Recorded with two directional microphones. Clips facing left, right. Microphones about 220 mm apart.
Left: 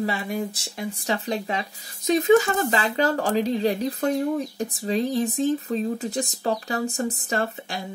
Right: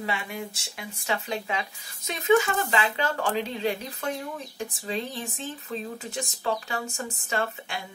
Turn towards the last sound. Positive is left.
turn(degrees=35)  # may be behind; listen again after turning